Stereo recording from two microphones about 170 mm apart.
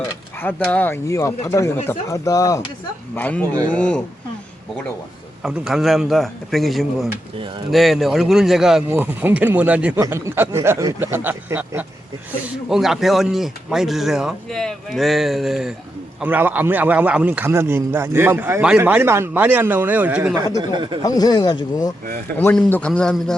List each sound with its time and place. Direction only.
0.3 s speech: 10° left (ahead or behind)
3.2 s speech: 10° left (ahead or behind)
5.4 s a man's voice: 5° right (ahead or behind)
12.6 s a man's voice: centre (ahead or behind)
20.6 s speech: 25° right (ahead or behind)
21.0 s speech: 20° left (ahead or behind)
22.4 s speech: 5° left (ahead or behind)